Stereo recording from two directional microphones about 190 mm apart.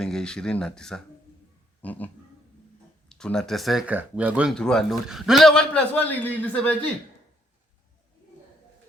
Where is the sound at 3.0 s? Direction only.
5° left (ahead or behind).